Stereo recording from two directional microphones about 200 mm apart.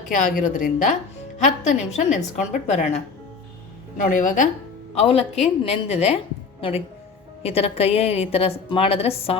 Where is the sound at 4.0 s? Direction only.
40° left (ahead or behind).